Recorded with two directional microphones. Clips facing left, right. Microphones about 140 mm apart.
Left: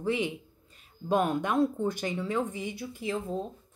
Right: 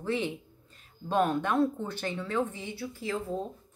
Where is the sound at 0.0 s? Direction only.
15° left (ahead or behind).